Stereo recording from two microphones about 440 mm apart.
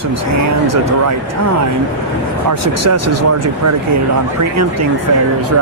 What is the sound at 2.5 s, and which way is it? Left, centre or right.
Speech, right.